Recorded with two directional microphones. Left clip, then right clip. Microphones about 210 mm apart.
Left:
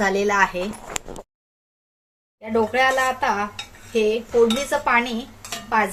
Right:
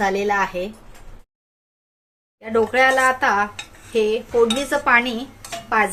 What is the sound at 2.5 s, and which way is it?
Dishes, 15° right (ahead or behind).